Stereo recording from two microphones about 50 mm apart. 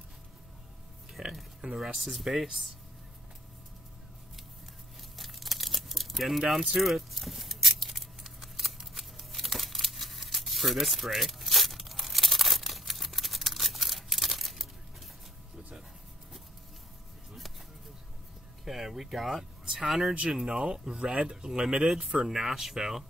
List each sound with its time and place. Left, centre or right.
1.2 s a sound: centre
1.6 s speech: centre
5.1 s crumpling: centre
6.7 s a sound: centre
8.7 s crumpling: centre
18.6 s speech: centre